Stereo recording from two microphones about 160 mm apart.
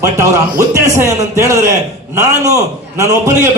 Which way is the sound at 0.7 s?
20° right (ahead or behind).